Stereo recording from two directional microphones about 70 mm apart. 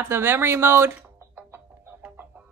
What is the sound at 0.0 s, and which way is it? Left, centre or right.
Speech, right.